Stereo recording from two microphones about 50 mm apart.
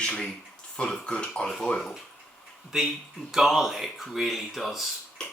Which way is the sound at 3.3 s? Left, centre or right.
Centre.